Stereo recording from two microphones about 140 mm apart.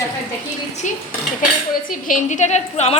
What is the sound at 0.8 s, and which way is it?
A woman's voice, 60° left (ahead or behind).